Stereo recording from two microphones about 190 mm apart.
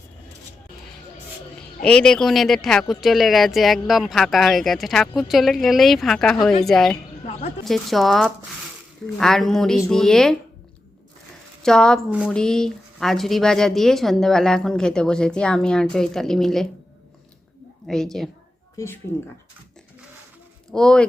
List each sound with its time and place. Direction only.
1.8 s a woman's voice: 5° left (ahead or behind)
11.6 s a woman's voice: 5° left (ahead or behind)
17.8 s a woman's voice: centre (ahead or behind)
18.8 s speech: 15° left (ahead or behind)
20.7 s speech: 5° left (ahead or behind)